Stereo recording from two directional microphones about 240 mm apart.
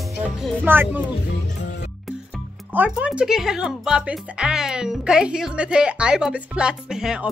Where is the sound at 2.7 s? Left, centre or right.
Centre.